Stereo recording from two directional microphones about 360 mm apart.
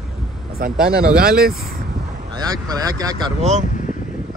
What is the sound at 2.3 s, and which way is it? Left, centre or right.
Speech, centre.